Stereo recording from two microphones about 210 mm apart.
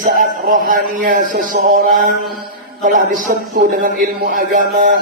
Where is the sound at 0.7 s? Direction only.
40° right (ahead or behind).